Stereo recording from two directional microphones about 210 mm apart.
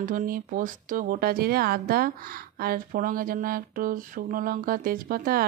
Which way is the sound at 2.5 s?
45° right (ahead or behind).